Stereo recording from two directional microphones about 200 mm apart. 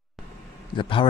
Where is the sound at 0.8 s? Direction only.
25° left (ahead or behind).